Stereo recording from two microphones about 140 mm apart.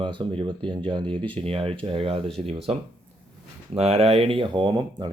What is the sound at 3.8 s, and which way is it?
Speech, 45° right (ahead or behind).